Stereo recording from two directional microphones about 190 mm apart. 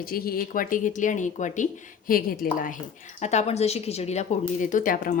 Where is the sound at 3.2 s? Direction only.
35° left (ahead or behind).